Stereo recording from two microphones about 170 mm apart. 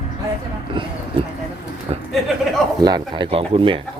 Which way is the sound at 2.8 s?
25° right (ahead or behind).